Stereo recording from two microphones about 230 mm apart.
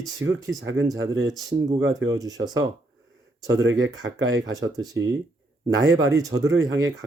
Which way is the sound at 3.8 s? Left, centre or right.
Right.